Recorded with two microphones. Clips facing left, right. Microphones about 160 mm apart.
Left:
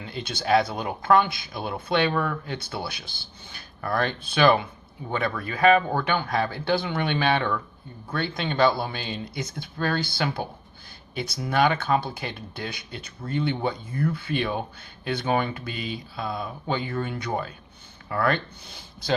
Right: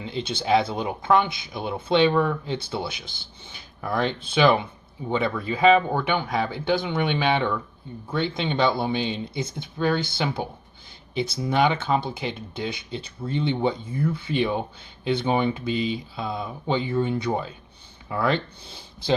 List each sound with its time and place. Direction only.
0.0 s speech: 20° right (ahead or behind)